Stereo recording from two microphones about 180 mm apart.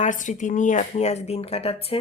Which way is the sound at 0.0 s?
45° left (ahead or behind).